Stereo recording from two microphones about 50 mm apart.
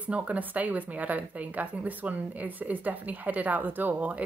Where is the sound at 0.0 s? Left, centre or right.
Right.